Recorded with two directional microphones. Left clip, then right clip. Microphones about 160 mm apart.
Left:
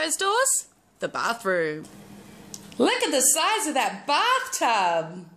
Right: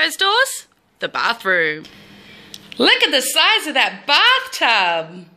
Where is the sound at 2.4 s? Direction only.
15° left (ahead or behind).